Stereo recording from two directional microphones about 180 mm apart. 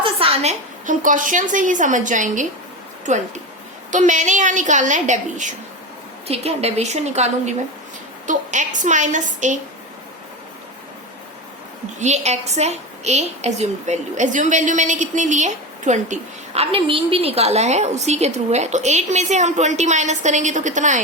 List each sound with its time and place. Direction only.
0.0 s a sound: 30° right (ahead or behind)
0.9 s a woman's voice: 45° right (ahead or behind)
11.9 s a woman's voice: 40° right (ahead or behind)